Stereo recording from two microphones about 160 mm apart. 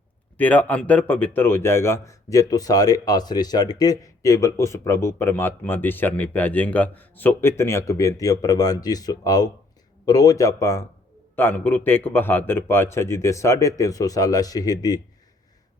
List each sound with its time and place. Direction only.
0.3 s speech: 10° left (ahead or behind)